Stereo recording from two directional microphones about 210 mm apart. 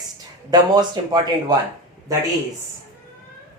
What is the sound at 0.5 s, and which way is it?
Speech, 20° right (ahead or behind).